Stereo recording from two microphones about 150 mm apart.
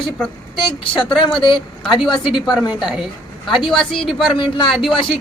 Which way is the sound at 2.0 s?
30° left (ahead or behind).